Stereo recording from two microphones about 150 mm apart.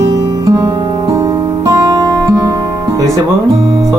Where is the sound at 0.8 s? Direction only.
25° right (ahead or behind).